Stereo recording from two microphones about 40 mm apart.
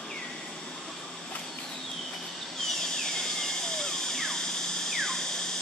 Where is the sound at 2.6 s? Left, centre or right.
Centre.